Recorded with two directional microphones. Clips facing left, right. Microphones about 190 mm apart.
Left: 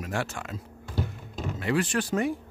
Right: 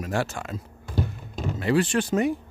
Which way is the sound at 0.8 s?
15° right (ahead or behind).